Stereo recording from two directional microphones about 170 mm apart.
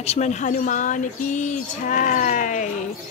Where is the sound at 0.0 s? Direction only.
40° left (ahead or behind).